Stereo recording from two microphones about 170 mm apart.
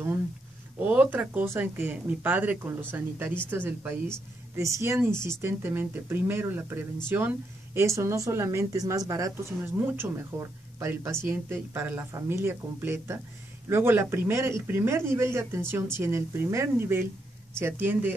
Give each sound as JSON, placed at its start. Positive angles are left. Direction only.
{"t": 0.7, "sound": "a woman's voice", "side_deg": -10}